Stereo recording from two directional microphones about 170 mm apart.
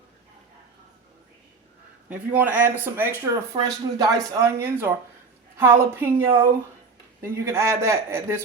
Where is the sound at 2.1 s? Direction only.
10° right (ahead or behind).